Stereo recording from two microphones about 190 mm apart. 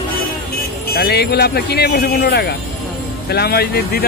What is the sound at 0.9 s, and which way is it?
Speech, 55° left (ahead or behind).